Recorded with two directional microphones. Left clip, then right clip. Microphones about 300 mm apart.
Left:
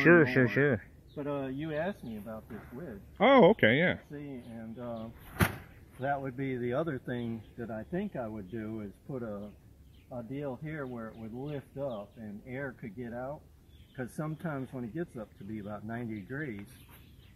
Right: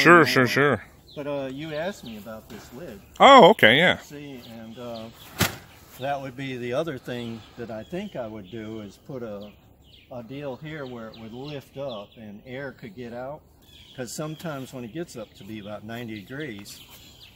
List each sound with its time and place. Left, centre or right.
0.0 s speech: centre
5.9 s speech: centre